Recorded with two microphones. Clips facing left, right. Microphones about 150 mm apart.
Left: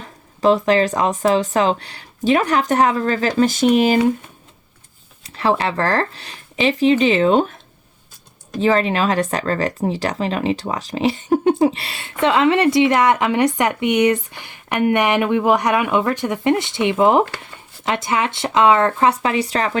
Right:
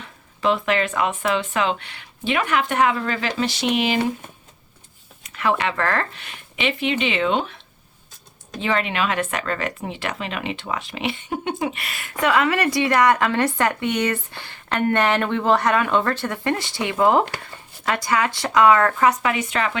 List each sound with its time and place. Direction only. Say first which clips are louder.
0.0 s speech: left 6 dB; 40° left (ahead or behind)
5.2 s speech: left 3 dB; 30° left (ahead or behind)
8.6 s speech: left 6 dB; 35° left (ahead or behind)